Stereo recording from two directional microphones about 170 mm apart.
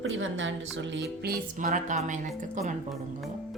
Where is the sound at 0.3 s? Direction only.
90° right.